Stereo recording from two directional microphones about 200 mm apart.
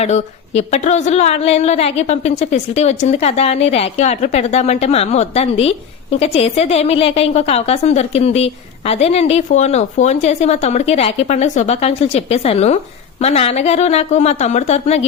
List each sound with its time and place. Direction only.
0.0 s a woman's voice: 35° left (ahead or behind)